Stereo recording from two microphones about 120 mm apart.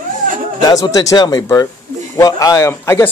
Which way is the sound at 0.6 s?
30° left (ahead or behind).